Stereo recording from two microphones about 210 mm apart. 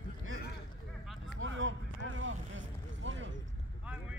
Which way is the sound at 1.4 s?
65° right (ahead or behind).